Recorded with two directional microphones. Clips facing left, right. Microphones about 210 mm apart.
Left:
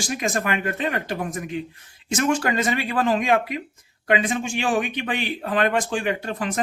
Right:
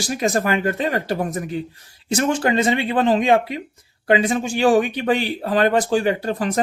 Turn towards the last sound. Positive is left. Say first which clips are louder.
# right 5 dB
turn(degrees=-35)  # may be behind; listen again after turning